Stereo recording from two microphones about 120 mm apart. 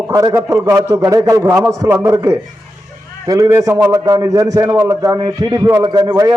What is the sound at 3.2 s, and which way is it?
A man's voice, 25° right (ahead or behind).